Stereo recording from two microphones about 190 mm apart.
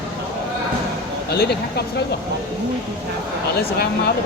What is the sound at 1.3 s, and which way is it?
Speech, 55° left (ahead or behind).